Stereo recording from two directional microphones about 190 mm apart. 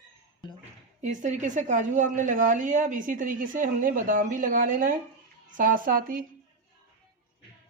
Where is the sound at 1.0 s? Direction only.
40° right (ahead or behind).